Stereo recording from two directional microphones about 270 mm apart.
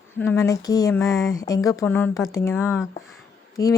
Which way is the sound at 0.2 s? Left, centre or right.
Centre.